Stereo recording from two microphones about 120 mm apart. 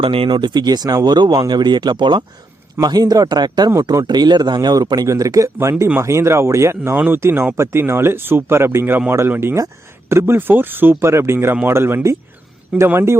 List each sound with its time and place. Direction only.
0.0 s speech: 50° right (ahead or behind); by 13.1 s 20° right (ahead or behind)